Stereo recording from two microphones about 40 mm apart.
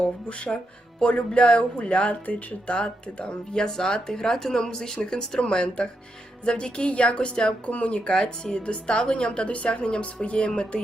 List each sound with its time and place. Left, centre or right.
0.0 s speech: left
8.0 s speech: centre